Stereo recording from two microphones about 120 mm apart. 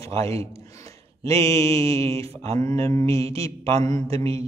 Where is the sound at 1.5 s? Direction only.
55° right (ahead or behind).